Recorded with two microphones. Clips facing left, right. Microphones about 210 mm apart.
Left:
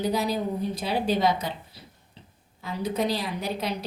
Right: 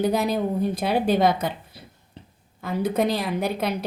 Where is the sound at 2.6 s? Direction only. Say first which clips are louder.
Right 4 dB; 55° right (ahead or behind).